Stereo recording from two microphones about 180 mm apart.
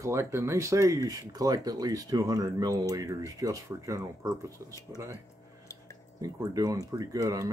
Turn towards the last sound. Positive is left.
turn(degrees=-20)  # may be behind; listen again after turning